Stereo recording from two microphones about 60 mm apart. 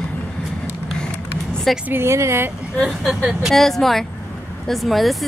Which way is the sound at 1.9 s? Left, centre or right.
Right.